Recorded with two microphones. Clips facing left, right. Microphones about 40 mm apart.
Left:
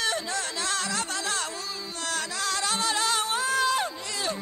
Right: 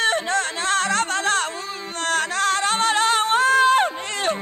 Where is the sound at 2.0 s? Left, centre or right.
Right.